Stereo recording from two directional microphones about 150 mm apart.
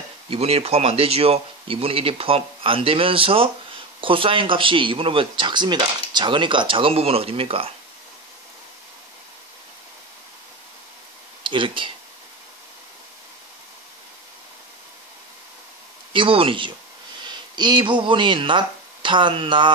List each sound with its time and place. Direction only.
0.3 s speech: 40° right (ahead or behind)
11.4 s speech: 35° right (ahead or behind)
16.1 s speech: 35° right (ahead or behind)